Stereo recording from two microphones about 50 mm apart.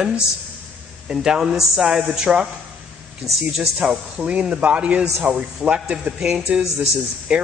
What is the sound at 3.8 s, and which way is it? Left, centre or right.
Speech, right.